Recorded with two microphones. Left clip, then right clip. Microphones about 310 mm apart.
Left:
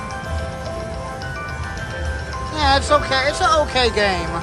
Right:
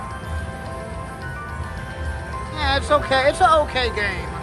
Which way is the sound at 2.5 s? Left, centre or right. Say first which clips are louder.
Left 3 dB; centre.